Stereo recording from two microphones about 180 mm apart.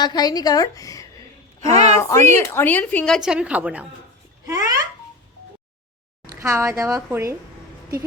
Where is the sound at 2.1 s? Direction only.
15° left (ahead or behind); by 3.8 s 5° right (ahead or behind).